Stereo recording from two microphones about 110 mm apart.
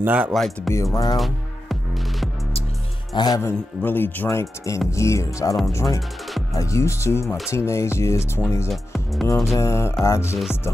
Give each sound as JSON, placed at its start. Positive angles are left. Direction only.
{"t": 0.0, "sound": "speech", "side_deg": -15}
{"t": 0.7, "sound": "speech", "side_deg": 0}
{"t": 1.1, "sound": "music", "side_deg": 0}
{"t": 3.2, "sound": "a man's voice", "side_deg": 35}
{"t": 3.4, "sound": "speech", "side_deg": 20}
{"t": 8.6, "sound": "speech", "side_deg": 0}
{"t": 9.6, "sound": "speech", "side_deg": 25}
{"t": 10.3, "sound": "speech", "side_deg": -5}